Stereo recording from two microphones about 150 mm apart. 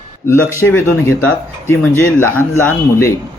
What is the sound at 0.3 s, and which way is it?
Speech, 15° left (ahead or behind).